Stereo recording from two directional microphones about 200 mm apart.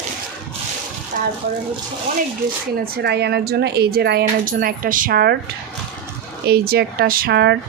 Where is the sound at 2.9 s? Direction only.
55° right (ahead or behind).